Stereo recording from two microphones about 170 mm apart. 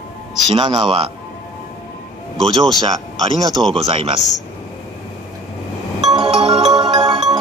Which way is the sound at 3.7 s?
30° right (ahead or behind).